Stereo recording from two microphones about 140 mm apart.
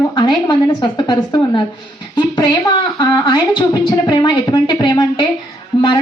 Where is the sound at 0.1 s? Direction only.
35° left (ahead or behind).